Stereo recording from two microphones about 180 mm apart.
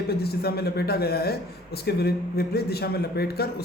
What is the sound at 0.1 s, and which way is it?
A man's voice, 60° left (ahead or behind).